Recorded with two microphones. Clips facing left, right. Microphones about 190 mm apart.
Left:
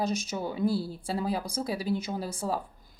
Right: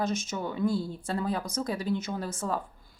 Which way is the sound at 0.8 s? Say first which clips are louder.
Even; 10° left (ahead or behind).